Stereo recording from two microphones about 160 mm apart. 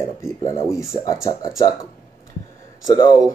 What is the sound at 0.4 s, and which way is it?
Speech, 20° left (ahead or behind).